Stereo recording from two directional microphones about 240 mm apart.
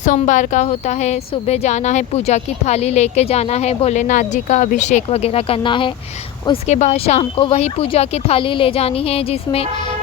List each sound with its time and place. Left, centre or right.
0.0 s speech: left